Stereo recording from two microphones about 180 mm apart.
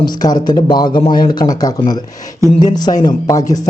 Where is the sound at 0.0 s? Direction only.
25° left (ahead or behind).